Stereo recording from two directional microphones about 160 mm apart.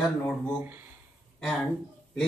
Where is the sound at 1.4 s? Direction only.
5° left (ahead or behind).